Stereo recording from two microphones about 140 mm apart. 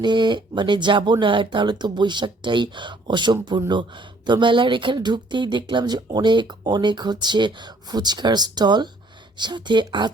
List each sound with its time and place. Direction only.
0.0 s speech: 35° right (ahead or behind)